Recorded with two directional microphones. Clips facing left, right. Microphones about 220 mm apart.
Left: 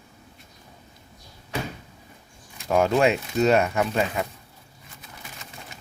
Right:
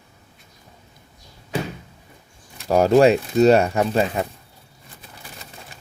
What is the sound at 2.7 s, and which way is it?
Speech, 35° right (ahead or behind).